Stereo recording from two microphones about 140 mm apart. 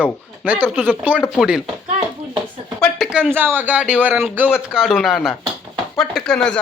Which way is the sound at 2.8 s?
5° right (ahead or behind).